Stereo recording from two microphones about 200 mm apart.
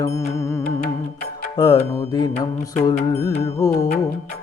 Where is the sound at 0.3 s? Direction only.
15° left (ahead or behind).